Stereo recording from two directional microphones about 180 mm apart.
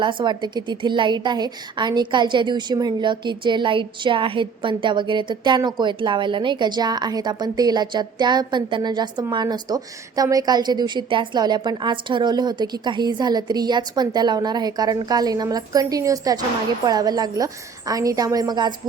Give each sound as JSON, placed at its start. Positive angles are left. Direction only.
{"t": 0.0, "sound": "a woman's voice", "side_deg": -25}